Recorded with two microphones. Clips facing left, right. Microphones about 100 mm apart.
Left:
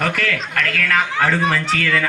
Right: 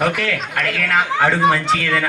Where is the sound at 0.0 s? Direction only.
10° right (ahead or behind).